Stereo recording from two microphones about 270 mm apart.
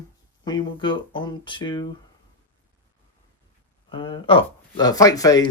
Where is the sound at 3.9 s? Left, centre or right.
Centre.